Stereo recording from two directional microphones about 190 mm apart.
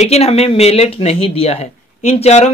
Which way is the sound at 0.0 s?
35° left (ahead or behind).